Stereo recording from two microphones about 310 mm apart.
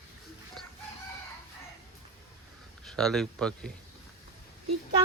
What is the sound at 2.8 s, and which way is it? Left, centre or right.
Speech, centre.